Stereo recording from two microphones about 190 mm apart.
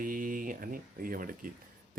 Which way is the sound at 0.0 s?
45° right (ahead or behind).